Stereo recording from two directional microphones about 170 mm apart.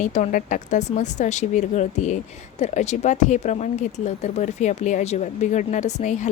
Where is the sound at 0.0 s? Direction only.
45° left (ahead or behind).